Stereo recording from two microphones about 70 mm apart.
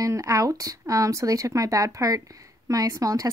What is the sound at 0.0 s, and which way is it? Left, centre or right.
Speech, right.